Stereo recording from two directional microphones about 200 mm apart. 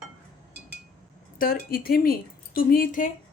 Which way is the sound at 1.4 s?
45° left (ahead or behind).